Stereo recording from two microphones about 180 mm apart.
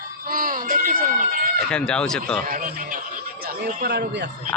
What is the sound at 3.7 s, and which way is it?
Speech, 65° right (ahead or behind).